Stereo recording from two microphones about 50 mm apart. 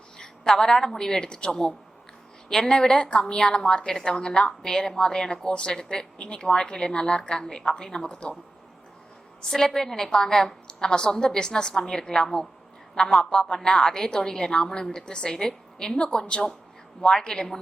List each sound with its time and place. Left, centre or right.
0.2 s a woman's voice: centre
9.4 s a woman's voice: centre